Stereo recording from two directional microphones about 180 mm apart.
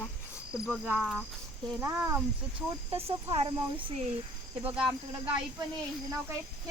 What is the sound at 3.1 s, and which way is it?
Speech, 35° right (ahead or behind).